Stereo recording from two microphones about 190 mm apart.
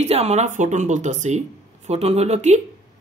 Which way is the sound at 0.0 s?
35° right (ahead or behind).